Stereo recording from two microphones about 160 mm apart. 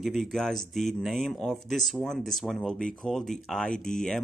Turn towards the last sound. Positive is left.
turn(degrees=5)  # may be behind; listen again after turning